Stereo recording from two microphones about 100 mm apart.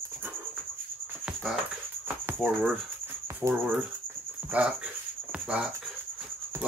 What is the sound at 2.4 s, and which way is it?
Speech, 15° right (ahead or behind).